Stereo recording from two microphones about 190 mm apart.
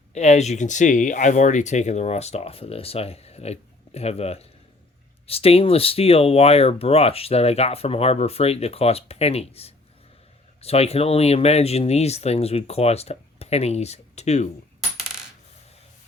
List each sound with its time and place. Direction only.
0.1 s speech: 35° left (ahead or behind)